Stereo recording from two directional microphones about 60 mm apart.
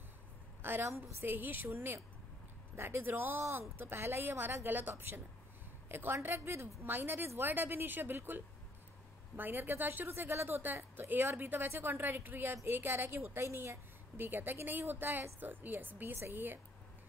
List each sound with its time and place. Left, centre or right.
0.6 s a woman's voice: right
9.4 s a woman's voice: right